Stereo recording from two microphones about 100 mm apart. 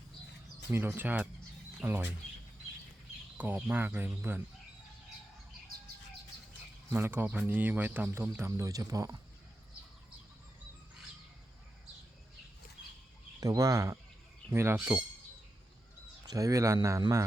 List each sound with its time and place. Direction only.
0.7 s speech: 25° right (ahead or behind)
3.3 s speech: 15° right (ahead or behind)
6.9 s speech: 20° right (ahead or behind)
13.4 s speech: 35° right (ahead or behind)
16.2 s speech: 35° right (ahead or behind)